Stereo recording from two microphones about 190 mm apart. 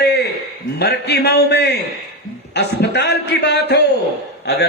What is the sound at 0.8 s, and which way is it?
A man's voice, 60° left (ahead or behind).